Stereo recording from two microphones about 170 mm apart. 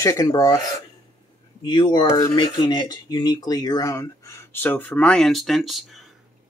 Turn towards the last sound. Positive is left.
turn(degrees=0)  # may be behind; listen again after turning